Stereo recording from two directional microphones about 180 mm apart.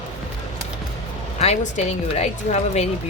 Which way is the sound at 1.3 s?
35° left (ahead or behind).